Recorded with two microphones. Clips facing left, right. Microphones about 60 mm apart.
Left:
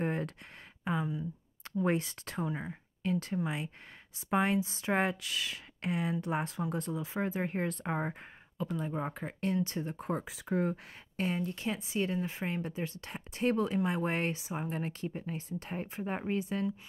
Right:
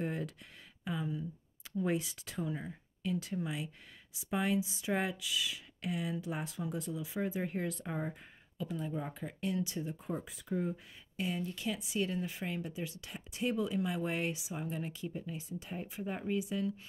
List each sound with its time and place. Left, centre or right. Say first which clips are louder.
0.0 s a sound: left 4 dB; left
0.8 s speech: left 4 dB; left
1.8 s speech: left 3 dB; left
9.9 s speech: left 4 dB; left
11.1 s speech: left 4 dB; left